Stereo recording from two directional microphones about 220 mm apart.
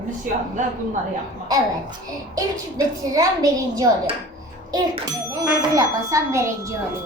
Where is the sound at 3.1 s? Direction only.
15° right (ahead or behind).